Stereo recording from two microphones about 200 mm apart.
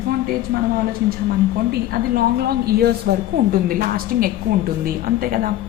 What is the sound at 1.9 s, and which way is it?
A woman's voice, 50° right (ahead or behind).